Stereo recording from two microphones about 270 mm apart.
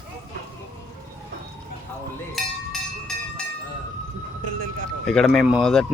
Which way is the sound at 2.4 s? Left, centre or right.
Centre.